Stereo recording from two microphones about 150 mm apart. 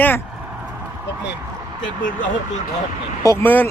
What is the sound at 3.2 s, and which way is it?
Speech, 20° left (ahead or behind).